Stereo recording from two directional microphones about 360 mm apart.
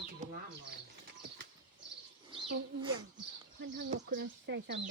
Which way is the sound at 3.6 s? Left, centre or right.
Right.